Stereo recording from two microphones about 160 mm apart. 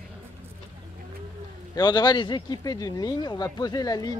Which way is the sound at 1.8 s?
25° left (ahead or behind).